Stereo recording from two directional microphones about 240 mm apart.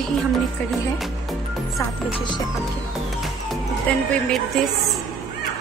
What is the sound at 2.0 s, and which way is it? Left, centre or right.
Speech, left.